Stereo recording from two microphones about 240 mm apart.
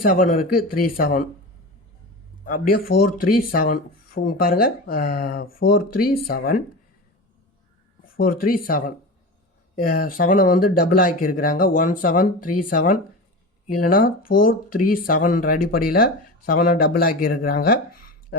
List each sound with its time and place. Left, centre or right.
0.0 s speech: left
2.4 s speech: left
8.0 s speech: left